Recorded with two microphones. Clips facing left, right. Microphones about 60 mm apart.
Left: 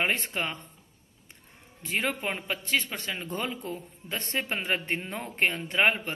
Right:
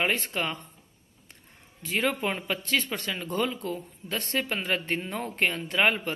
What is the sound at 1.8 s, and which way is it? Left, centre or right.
A man's voice, centre.